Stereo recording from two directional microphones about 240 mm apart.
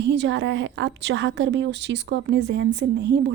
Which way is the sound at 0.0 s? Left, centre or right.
Right.